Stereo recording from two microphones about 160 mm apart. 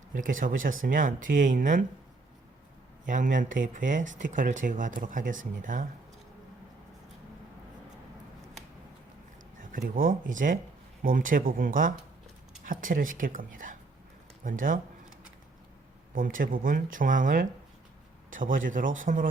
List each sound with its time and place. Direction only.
0.1 s speech: 55° right (ahead or behind)
3.1 s speech: 55° right (ahead or behind)
9.6 s speech: 60° right (ahead or behind)
16.1 s speech: 60° right (ahead or behind)